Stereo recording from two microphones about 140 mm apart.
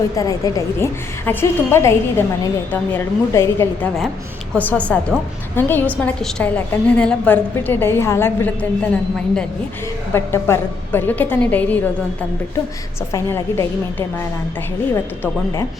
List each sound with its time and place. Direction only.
0.2 s a woman's voice: 25° left (ahead or behind)
10.1 s a woman's voice: 15° left (ahead or behind)
13.1 s a woman's voice: 20° left (ahead or behind)
14.9 s a woman's voice: 15° left (ahead or behind)